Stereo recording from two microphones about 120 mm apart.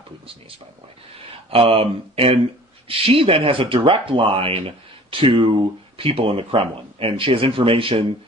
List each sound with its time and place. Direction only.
1.5 s speech: 50° right (ahead or behind)